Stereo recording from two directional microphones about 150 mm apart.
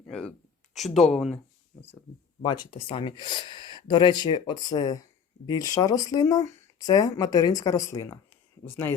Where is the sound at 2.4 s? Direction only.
30° left (ahead or behind).